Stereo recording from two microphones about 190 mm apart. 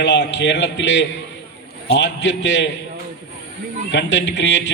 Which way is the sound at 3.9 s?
65° left (ahead or behind).